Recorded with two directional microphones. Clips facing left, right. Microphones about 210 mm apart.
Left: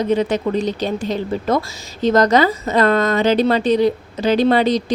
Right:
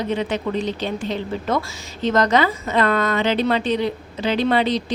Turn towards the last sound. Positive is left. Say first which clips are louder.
# left 4 dB
turn(degrees=40)  # may be behind; listen again after turning